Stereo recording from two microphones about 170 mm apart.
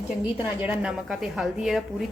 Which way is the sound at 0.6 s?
10° right (ahead or behind).